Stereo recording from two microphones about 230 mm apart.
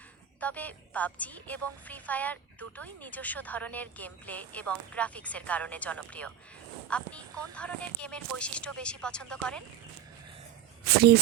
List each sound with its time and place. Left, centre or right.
0.3 s a woman's voice: centre
10.8 s speech: right